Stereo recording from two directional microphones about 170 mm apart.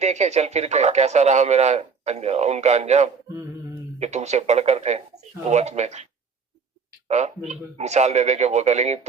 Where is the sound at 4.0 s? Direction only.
40° right (ahead or behind).